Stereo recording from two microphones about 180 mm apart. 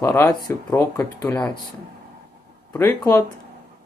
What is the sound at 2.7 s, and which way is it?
Speech, 15° left (ahead or behind).